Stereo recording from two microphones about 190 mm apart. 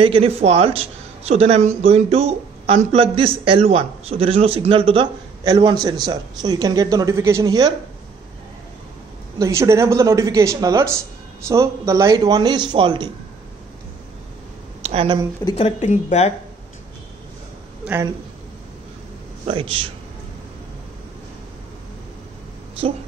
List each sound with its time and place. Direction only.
0.0 s speech: 30° right (ahead or behind)
9.4 s speech: 15° right (ahead or behind)
14.8 s speech: 30° right (ahead or behind)
15.4 s a woman's voice: 35° left (ahead or behind)
19.4 s speech: 30° right (ahead or behind)